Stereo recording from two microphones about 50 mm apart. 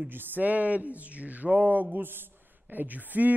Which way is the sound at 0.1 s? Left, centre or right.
Right.